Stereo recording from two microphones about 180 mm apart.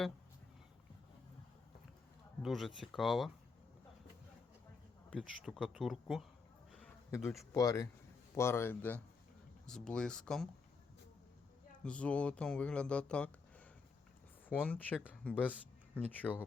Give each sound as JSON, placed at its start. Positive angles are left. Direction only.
{"t": 2.4, "sound": "speech", "side_deg": 0}
{"t": 5.1, "sound": "speech", "side_deg": 0}
{"t": 7.1, "sound": "speech", "side_deg": 15}
{"t": 11.8, "sound": "speech", "side_deg": 5}
{"t": 14.5, "sound": "speech", "side_deg": 10}